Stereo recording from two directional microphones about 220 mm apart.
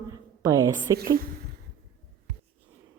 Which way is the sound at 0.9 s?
40° right (ahead or behind).